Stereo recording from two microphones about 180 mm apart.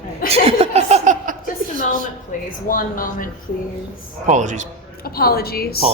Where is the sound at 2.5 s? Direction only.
50° left (ahead or behind).